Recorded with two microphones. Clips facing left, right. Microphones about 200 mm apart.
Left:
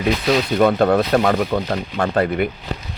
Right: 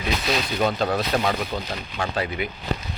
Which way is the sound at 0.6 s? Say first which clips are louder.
Left 8 dB; 55° left (ahead or behind).